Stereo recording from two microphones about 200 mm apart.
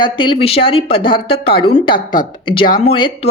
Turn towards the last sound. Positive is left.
turn(degrees=25)  # may be behind; listen again after turning